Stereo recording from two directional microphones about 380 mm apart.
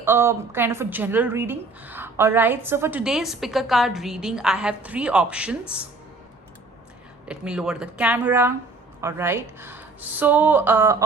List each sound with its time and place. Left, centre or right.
0.0 s a woman's voice: centre
7.3 s a woman's voice: centre